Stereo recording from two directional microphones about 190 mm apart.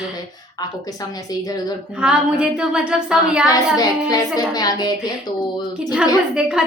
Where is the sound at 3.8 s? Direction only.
20° left (ahead or behind).